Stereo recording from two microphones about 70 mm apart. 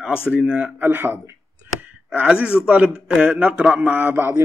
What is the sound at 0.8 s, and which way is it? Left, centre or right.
Speech, right.